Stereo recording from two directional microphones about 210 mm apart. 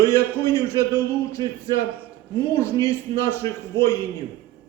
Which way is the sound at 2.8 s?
15° left (ahead or behind).